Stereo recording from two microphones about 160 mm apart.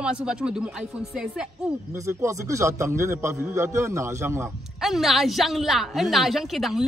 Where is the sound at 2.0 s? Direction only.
20° right (ahead or behind).